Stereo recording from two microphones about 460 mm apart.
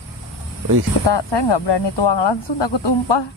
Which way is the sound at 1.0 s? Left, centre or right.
Left.